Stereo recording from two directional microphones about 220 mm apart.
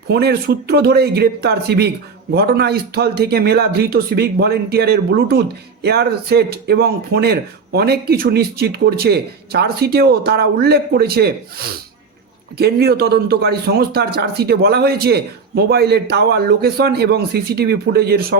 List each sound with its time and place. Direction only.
0.1 s speech: 45° right (ahead or behind)